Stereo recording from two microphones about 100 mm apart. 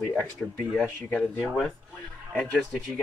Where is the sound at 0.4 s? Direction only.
5° left (ahead or behind).